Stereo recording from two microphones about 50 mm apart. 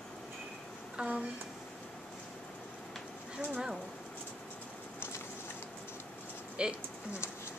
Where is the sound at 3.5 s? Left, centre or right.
Centre.